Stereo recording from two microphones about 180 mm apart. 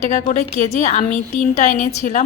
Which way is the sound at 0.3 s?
45° left (ahead or behind).